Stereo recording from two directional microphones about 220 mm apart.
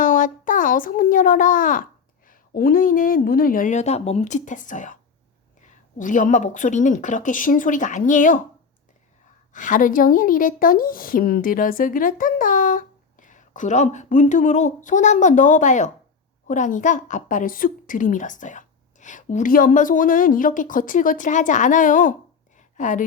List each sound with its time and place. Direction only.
0.0 s a sound: 35° left (ahead or behind)
2.2 s a woman's voice: 40° left (ahead or behind)
6.0 s a woman's voice: 35° left (ahead or behind)
9.5 s a woman's voice: 35° left (ahead or behind)